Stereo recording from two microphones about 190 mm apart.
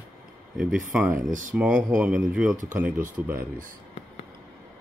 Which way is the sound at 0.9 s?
5° right (ahead or behind).